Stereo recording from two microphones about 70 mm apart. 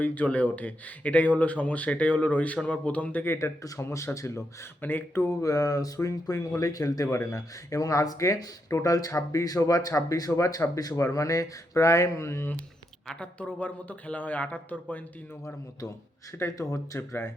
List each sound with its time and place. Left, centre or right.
0.0 s speech: left
3.6 s speech: left
4.8 s speech: left
5.4 s speech: left
10.9 s speech: left
13.1 s speech: centre
16.6 s speech: left